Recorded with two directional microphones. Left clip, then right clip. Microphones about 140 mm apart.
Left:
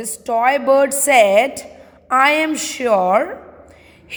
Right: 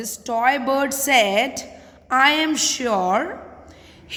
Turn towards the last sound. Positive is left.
turn(degrees=20)  # may be behind; listen again after turning